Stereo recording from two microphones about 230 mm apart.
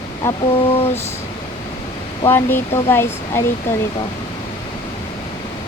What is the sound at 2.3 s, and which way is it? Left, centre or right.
Speech, centre.